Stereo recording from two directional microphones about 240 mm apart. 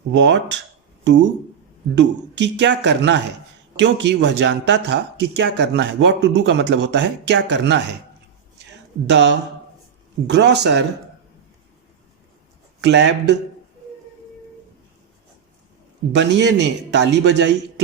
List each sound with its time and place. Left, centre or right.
0.1 s speech: right
9.0 s speech: right
12.8 s speech: right
16.1 s speech: right